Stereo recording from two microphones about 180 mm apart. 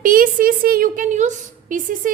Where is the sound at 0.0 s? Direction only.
50° right (ahead or behind).